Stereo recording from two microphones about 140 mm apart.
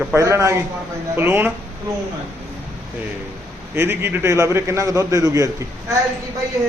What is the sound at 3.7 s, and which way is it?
A man's voice, 15° right (ahead or behind).